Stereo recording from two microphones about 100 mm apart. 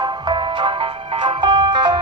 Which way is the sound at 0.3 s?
55° right (ahead or behind).